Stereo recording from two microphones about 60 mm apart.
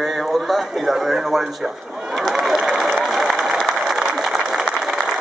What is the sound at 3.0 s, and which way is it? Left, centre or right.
Applause, centre.